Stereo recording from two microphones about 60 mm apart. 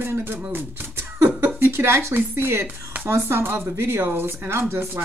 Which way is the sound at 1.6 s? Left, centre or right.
Right.